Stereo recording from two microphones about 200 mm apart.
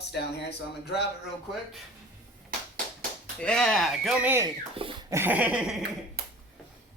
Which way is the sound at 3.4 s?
5° left (ahead or behind).